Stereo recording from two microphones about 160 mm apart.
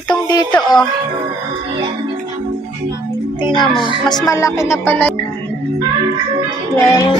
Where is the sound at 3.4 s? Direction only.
30° left (ahead or behind); by 5.1 s 10° left (ahead or behind).